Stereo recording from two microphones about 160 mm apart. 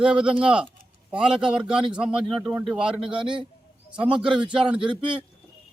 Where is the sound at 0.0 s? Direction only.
5° right (ahead or behind).